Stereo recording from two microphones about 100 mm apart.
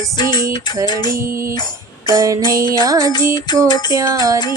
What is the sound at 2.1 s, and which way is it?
Music, 35° right (ahead or behind).